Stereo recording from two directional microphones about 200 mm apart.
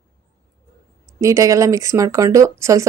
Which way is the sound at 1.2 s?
15° right (ahead or behind).